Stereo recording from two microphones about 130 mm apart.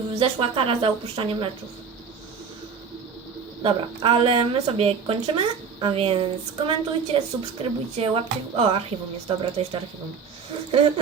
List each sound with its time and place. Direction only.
0.1 s a woman's voice: 45° right (ahead or behind)
3.6 s a woman's voice: 45° right (ahead or behind)